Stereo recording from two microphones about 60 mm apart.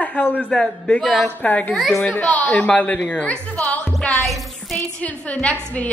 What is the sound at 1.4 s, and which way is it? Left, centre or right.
A woman's voice, left.